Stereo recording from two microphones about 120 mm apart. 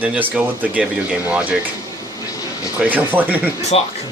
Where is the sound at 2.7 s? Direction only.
15° right (ahead or behind).